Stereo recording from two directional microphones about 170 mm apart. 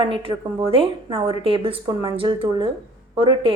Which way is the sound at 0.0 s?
30° right (ahead or behind).